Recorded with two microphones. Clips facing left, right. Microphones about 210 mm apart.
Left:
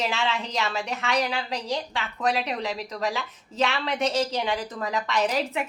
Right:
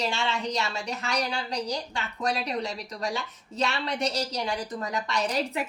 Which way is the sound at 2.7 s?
90° left.